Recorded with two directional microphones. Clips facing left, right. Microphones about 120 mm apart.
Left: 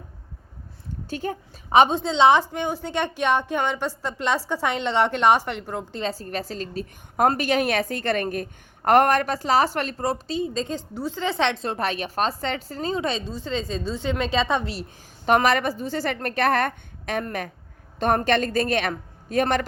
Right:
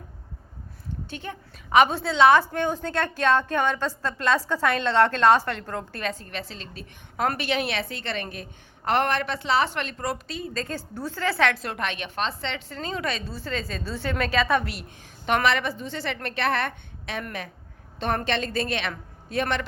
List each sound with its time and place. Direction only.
1.1 s a woman's voice: 40° left (ahead or behind); by 6.0 s 15° left (ahead or behind)
6.0 s a woman's voice: 35° left (ahead or behind)
15.4 s a woman's voice: 40° left (ahead or behind)
18.3 s a man's voice: 45° left (ahead or behind)